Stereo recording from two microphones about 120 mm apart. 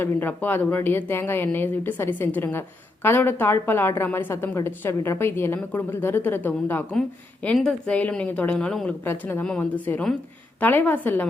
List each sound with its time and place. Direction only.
0.0 s a woman's voice: 15° left (ahead or behind)
7.4 s speech: 5° left (ahead or behind)
9.0 s speech: 15° left (ahead or behind)